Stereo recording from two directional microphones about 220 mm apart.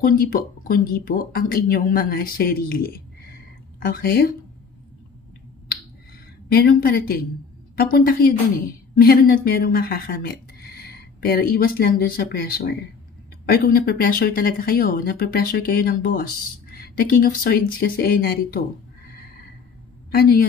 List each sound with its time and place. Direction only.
0.0 s speech: 40° left (ahead or behind)
6.5 s speech: 40° left (ahead or behind)
20.1 s a woman's voice: 45° left (ahead or behind)